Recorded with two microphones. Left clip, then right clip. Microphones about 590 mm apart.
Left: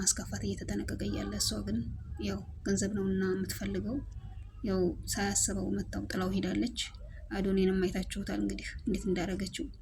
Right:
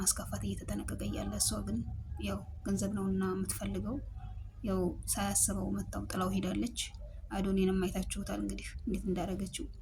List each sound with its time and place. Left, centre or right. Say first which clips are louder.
0.0 s speech: left 3 dB; right